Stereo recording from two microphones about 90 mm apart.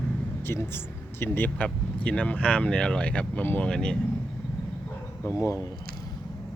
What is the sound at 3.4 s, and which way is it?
Speech, 25° left (ahead or behind).